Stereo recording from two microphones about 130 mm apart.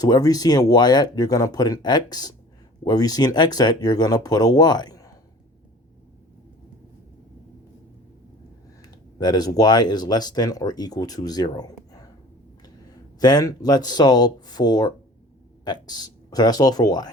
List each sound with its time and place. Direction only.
0.0 s speech: 30° left (ahead or behind)
8.8 s speech: 30° left (ahead or behind)
13.1 s speech: 30° left (ahead or behind)